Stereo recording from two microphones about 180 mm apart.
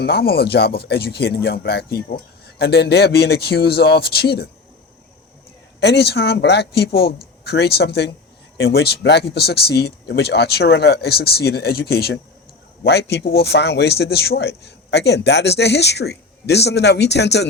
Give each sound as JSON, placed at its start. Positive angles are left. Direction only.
{"t": 0.0, "sound": "speech", "side_deg": 60}
{"t": 5.8, "sound": "speech", "side_deg": 65}